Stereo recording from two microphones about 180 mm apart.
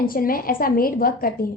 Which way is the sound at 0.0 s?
55° left (ahead or behind).